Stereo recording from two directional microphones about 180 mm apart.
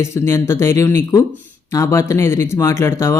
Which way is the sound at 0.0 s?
15° left (ahead or behind).